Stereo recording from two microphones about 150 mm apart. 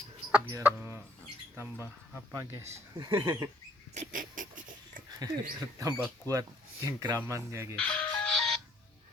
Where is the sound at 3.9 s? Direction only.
60° right (ahead or behind).